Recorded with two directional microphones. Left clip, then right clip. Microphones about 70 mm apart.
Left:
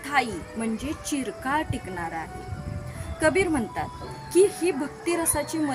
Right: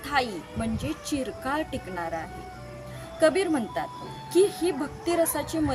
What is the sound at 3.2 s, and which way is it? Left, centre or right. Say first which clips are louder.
A woman's voice: even; right.